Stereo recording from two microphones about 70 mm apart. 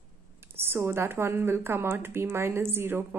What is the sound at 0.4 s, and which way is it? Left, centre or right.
Speech, right.